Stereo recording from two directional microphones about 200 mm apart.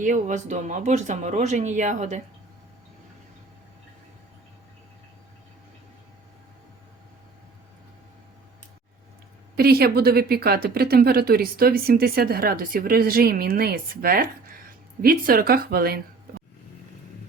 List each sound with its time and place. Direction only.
0.0 s speech: 40° right (ahead or behind)
9.6 s speech: 50° right (ahead or behind)